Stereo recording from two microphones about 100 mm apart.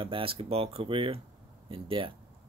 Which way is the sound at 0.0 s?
60° right (ahead or behind).